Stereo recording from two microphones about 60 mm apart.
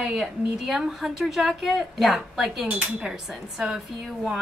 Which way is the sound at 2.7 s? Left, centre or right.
Right.